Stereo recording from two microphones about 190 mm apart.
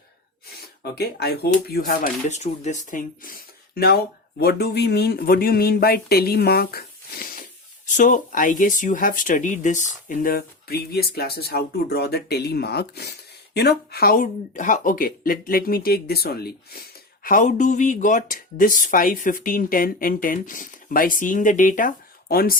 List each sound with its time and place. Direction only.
0.8 s speech: 55° left (ahead or behind)
3.8 s speech: 55° left (ahead or behind)
17.2 s speech: 45° left (ahead or behind)